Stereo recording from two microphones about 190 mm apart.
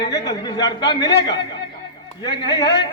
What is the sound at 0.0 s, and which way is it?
A man's voice, 20° left (ahead or behind).